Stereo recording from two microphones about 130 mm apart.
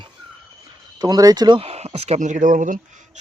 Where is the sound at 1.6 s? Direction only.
50° right (ahead or behind); by 2.7 s 85° right.